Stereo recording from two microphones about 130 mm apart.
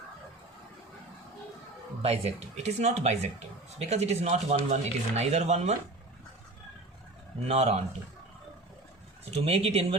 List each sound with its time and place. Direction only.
2.0 s speech: 55° right (ahead or behind)
7.4 s speech: 55° right (ahead or behind)
9.3 s speech: 50° right (ahead or behind)